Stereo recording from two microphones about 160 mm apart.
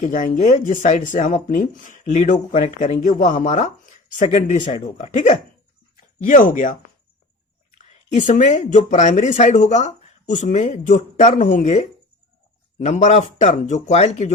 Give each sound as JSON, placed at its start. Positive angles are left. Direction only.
{"t": 0.0, "sound": "speech", "side_deg": 50}
{"t": 4.7, "sound": "speech", "side_deg": 35}
{"t": 5.1, "sound": "speech", "side_deg": 50}
{"t": 8.1, "sound": "speech", "side_deg": 50}